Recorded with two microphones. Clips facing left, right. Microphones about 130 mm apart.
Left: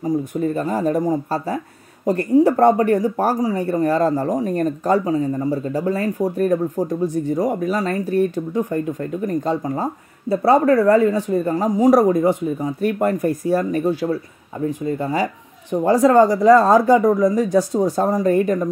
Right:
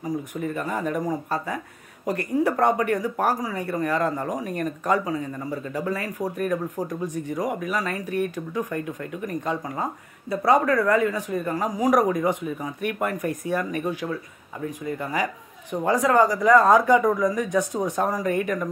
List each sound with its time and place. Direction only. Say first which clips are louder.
0.3 s speech: left 7 dB; 35° left (ahead or behind)